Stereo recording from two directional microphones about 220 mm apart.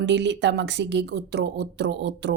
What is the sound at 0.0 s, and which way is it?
Speech, 55° right (ahead or behind).